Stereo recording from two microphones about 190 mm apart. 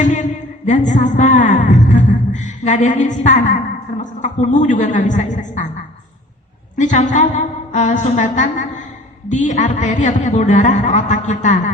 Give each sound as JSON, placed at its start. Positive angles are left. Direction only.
{"t": 0.0, "sound": "a sound", "side_deg": 40}
{"t": 0.9, "sound": "a woman's voice", "side_deg": 40}
{"t": 6.7, "sound": "a woman's voice", "side_deg": 40}